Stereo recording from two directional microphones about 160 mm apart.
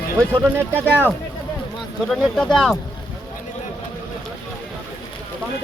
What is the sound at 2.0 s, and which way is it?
Speech, 5° left (ahead or behind).